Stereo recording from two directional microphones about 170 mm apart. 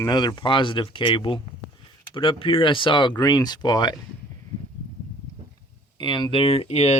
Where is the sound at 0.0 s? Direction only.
25° left (ahead or behind).